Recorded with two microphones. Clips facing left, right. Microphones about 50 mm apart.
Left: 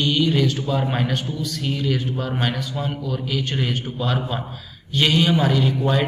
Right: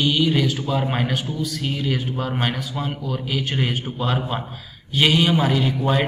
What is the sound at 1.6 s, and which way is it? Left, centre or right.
Speech, centre.